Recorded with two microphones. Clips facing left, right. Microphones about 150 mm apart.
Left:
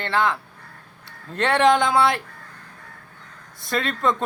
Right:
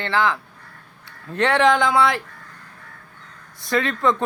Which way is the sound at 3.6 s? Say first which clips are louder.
Right 3 dB; 25° left (ahead or behind).